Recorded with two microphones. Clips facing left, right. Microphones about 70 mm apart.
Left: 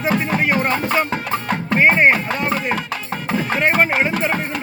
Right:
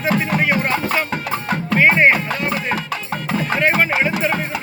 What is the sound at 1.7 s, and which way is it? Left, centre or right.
Music, centre.